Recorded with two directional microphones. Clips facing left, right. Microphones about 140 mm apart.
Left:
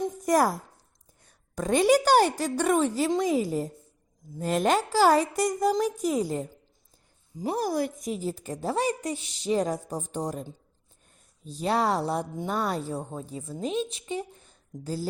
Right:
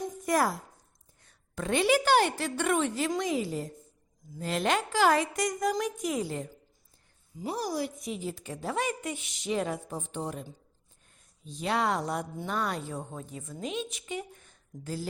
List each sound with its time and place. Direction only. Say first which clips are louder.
0.2 s a woman's voice: left 4 dB; 40° left (ahead or behind)
7.5 s a woman's voice: left 5 dB; 50° left (ahead or behind)
11.4 s a woman's voice: left 3 dB; 35° left (ahead or behind)